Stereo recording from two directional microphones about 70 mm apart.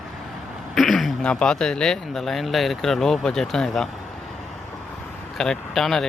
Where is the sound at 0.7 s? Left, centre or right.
Centre.